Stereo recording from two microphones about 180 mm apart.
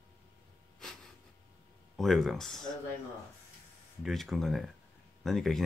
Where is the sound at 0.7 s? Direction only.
Centre (ahead or behind).